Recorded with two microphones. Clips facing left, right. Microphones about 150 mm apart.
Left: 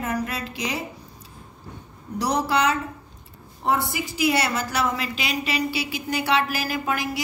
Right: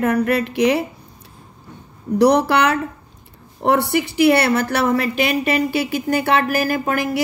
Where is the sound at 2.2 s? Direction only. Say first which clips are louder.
Right 8 dB; 65° right (ahead or behind).